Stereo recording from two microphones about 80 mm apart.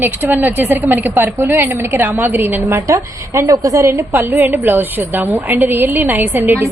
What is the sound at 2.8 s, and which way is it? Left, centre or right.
A woman's voice, right.